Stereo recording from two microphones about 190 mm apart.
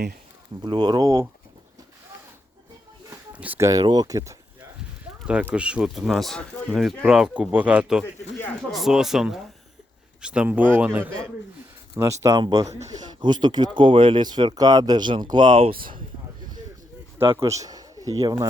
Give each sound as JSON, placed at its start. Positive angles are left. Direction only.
{"t": 0.6, "sound": "speech", "side_deg": -25}
{"t": 3.1, "sound": "speech", "side_deg": -10}
{"t": 17.3, "sound": "speech", "side_deg": -15}